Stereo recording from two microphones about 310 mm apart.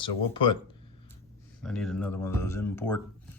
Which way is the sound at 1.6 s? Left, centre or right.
Centre.